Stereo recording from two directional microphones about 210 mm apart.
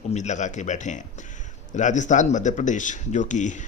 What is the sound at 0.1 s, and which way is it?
Speech, 35° left (ahead or behind).